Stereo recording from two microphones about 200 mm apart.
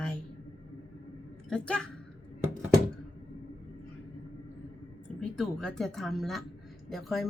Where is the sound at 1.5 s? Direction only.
5° left (ahead or behind).